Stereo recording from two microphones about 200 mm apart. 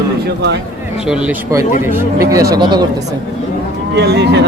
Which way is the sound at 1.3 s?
15° right (ahead or behind).